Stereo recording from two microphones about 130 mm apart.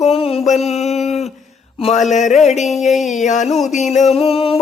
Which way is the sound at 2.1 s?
65° left (ahead or behind).